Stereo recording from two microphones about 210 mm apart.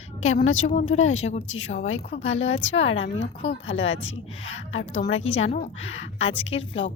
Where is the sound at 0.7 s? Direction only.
35° left (ahead or behind).